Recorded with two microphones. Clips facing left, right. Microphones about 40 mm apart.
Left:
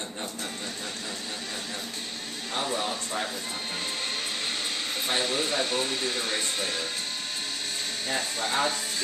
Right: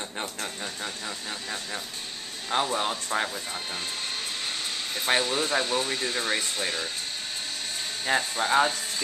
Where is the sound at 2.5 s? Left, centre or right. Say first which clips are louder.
Right 5 dB; right.